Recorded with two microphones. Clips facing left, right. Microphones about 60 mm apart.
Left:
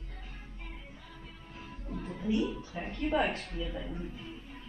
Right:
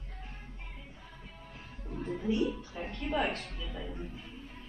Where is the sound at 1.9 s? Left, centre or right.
Centre.